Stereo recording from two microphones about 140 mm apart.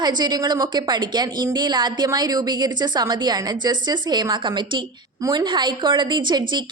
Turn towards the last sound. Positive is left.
turn(degrees=-30)  # may be behind; listen again after turning